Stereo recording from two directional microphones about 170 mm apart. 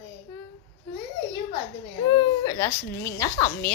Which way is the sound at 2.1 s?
20° left (ahead or behind).